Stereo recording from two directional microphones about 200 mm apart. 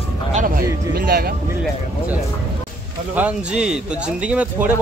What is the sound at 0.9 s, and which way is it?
Speech, 50° right (ahead or behind).